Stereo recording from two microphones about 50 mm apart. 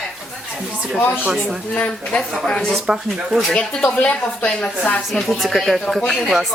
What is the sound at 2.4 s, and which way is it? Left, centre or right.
A woman's voice, centre.